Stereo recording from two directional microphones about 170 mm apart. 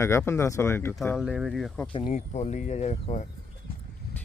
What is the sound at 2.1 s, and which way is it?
Speech, 45° left (ahead or behind).